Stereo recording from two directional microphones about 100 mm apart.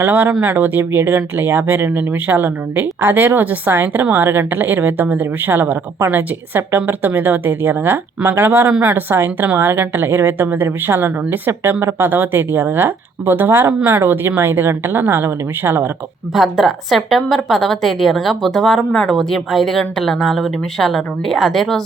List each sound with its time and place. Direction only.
0.0 s speech: 15° right (ahead or behind)
16.3 s a woman's voice: centre (ahead or behind)